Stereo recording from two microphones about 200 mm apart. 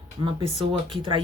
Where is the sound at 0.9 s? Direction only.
20° right (ahead or behind).